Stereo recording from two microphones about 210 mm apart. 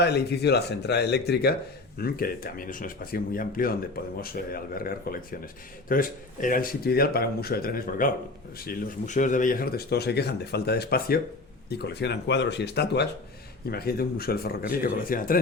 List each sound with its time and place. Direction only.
0.0 s speech: 50° left (ahead or behind)